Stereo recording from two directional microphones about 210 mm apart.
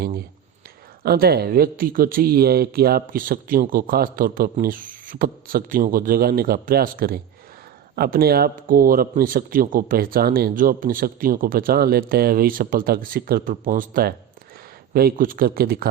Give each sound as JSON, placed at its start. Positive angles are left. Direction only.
{"t": 1.0, "sound": "speech", "side_deg": -45}